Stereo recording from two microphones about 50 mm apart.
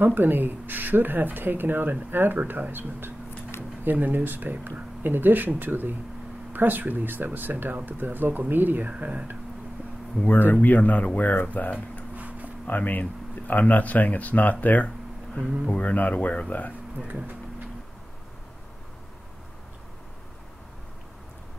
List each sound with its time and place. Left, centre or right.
0.0 s speech: right
8.9 s speech: right
10.2 s speech: left
12.2 s a sound: right
12.6 s speech: left